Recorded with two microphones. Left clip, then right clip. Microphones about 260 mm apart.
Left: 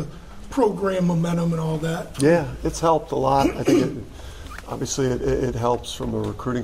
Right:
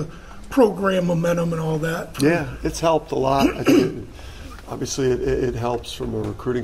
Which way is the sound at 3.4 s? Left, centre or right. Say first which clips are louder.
Right 2 dB; right.